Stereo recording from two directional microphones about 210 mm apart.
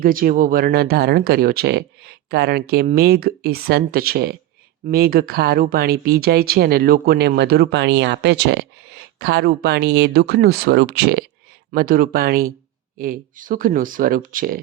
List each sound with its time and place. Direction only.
0.0 s speech: 40° right (ahead or behind)